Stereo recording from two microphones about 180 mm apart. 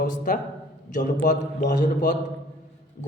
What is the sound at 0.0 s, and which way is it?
A man's voice, 45° left (ahead or behind).